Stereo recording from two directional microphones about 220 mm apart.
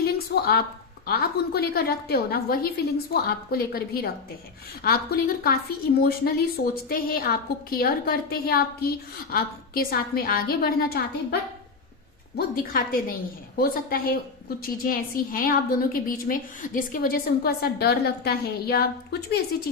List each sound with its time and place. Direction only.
0.0 s a sound: 45° left (ahead or behind)
1.0 s a woman's voice: 45° left (ahead or behind)
12.4 s a woman's voice: 40° left (ahead or behind)